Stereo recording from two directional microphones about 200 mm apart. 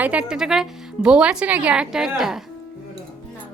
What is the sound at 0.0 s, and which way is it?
Speech, 5° right (ahead or behind).